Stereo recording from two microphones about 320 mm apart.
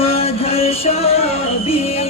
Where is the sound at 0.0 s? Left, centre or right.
Centre.